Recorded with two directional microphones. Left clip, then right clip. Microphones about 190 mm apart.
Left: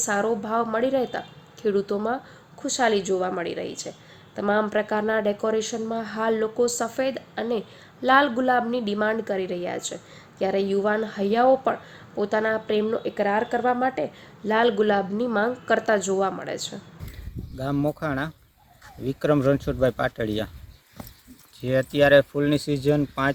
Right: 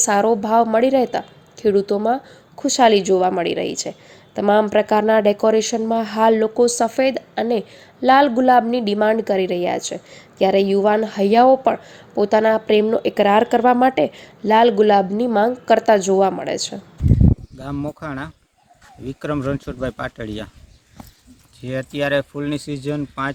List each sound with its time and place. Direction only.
0.0 s a woman's voice: 30° right (ahead or behind)
17.6 s speech: centre (ahead or behind)
21.6 s speech: centre (ahead or behind)